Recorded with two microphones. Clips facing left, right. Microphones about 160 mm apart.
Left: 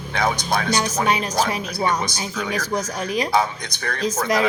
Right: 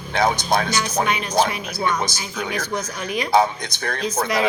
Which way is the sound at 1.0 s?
35° left (ahead or behind).